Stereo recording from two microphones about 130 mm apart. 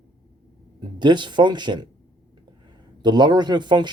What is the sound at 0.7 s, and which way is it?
Speech, 35° right (ahead or behind).